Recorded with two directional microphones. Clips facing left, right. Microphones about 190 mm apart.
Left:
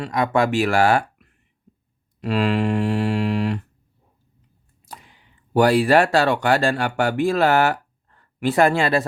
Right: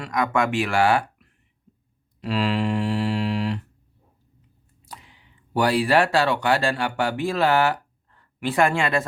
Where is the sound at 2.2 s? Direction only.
50° left (ahead or behind).